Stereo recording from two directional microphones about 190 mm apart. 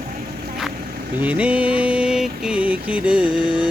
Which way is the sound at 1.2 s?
5° right (ahead or behind).